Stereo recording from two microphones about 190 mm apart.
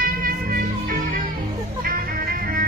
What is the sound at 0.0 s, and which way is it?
Music, 50° right (ahead or behind).